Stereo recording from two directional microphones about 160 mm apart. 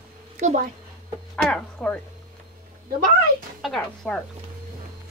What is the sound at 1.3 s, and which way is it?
Speech, 5° left (ahead or behind).